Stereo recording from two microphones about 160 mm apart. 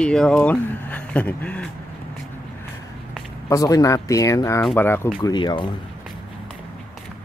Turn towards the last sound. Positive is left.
turn(degrees=30)  # may be behind; listen again after turning